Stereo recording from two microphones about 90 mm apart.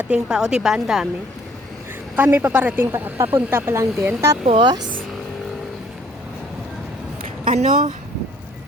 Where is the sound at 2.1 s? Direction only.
20° right (ahead or behind).